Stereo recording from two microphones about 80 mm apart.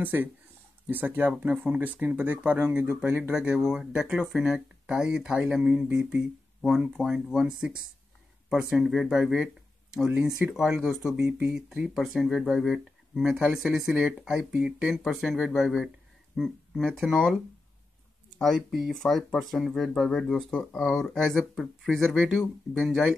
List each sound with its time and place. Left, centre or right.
0.0 s speech: right
3.3 s speech: centre
5.9 s speech: right
6.6 s speech: centre
11.9 s speech: centre
18.4 s speech: centre